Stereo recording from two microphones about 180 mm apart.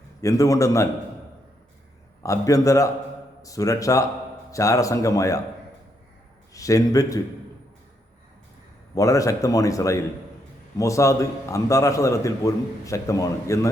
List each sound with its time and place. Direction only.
0.2 s a man's voice: 20° left (ahead or behind)
2.2 s a man's voice: 20° left (ahead or behind)
6.5 s a man's voice: 20° left (ahead or behind)
9.0 s a man's voice: 20° left (ahead or behind)